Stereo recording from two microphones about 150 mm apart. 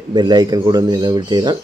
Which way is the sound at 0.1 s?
30° right (ahead or behind).